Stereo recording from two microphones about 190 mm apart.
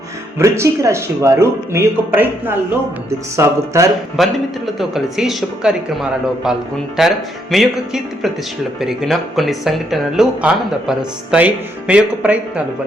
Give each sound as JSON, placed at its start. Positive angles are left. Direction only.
{"t": 0.3, "sound": "speech", "side_deg": -15}
{"t": 3.3, "sound": "speech", "side_deg": -15}
{"t": 4.2, "sound": "speech", "side_deg": 0}